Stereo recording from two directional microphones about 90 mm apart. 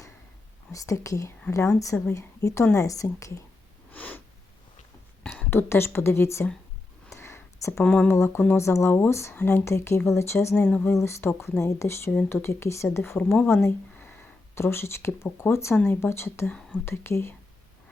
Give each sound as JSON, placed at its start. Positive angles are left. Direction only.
{"t": 0.7, "sound": "a woman's voice", "side_deg": 35}
{"t": 3.9, "sound": "snort", "side_deg": 20}
{"t": 5.3, "sound": "a woman's voice", "side_deg": 25}
{"t": 7.1, "sound": "a sound", "side_deg": 30}
{"t": 7.9, "sound": "speech", "side_deg": 15}
{"t": 8.1, "sound": "a woman's voice", "side_deg": 30}
{"t": 16.5, "sound": "speech", "side_deg": 10}
{"t": 16.8, "sound": "a woman's voice", "side_deg": 30}